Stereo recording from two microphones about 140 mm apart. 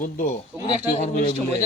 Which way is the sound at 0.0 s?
75° left (ahead or behind).